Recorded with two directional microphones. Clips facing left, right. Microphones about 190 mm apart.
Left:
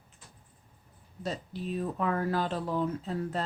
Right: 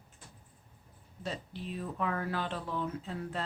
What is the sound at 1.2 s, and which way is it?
Speech, 40° left (ahead or behind).